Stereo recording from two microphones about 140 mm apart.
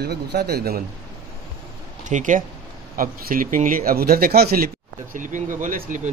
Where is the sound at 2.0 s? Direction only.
65° right (ahead or behind).